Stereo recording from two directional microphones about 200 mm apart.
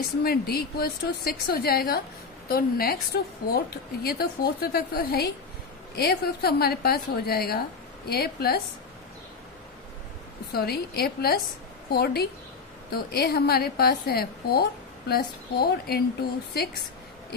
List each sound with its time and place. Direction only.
0.2 s a woman's voice: 50° left (ahead or behind)
10.5 s a woman's voice: 50° left (ahead or behind)